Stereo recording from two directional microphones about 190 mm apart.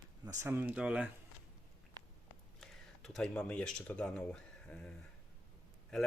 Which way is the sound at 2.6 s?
Centre (ahead or behind).